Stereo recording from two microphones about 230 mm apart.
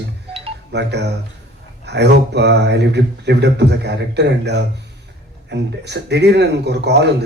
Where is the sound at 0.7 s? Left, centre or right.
Right.